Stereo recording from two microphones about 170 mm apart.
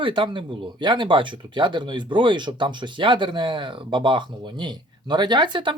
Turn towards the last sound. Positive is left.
turn(degrees=-30)  # may be behind; listen again after turning